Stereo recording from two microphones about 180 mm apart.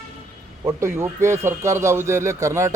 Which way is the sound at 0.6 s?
15° right (ahead or behind).